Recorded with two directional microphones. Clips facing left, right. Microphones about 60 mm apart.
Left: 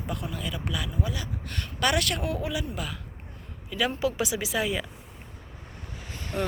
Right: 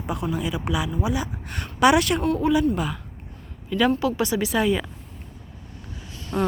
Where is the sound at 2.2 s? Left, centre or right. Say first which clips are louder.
Right 10 dB; centre.